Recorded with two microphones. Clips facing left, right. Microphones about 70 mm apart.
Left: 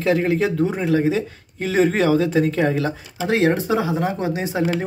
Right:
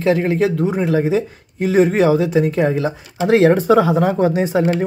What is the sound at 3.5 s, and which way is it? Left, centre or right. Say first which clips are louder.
Speech: right 7 dB; right.